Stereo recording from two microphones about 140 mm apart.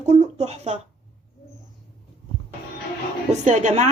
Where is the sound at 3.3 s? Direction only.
60° right (ahead or behind).